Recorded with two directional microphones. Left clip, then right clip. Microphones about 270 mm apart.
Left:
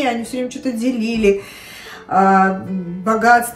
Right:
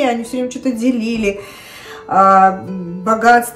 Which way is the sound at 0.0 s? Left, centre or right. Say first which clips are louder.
Right 3 dB; centre.